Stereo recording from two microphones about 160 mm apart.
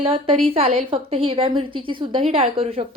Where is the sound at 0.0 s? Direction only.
35° right (ahead or behind).